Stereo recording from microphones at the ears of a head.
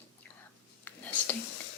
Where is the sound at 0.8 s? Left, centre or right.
Left.